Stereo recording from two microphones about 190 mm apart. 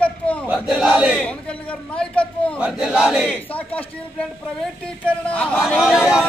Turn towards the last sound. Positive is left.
turn(degrees=-5)  # may be behind; listen again after turning